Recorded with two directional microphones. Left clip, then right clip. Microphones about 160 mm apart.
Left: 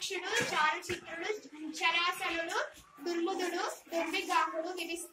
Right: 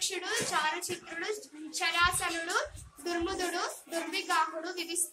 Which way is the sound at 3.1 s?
25° right (ahead or behind).